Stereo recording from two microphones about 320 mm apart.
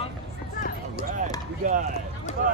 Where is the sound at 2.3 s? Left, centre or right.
Left.